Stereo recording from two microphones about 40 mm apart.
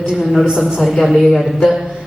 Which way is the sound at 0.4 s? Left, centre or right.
Centre.